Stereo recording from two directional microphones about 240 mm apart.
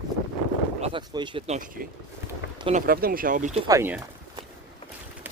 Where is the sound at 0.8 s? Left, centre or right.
Centre; by 1.9 s right.